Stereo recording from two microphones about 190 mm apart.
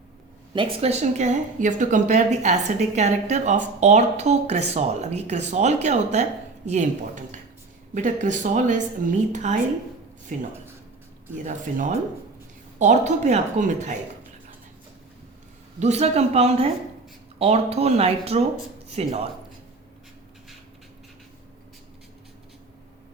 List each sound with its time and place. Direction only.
0.5 s speech: 30° right (ahead or behind)
15.8 s speech: 35° right (ahead or behind)